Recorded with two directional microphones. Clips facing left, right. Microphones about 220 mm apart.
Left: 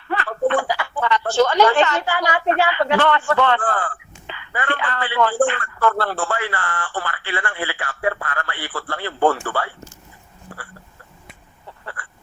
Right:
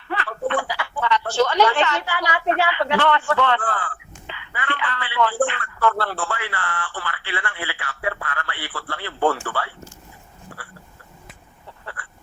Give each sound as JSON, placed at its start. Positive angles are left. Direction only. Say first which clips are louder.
{"t": 0.1, "sound": "speech", "louder": "left 4 dB", "side_deg": 45}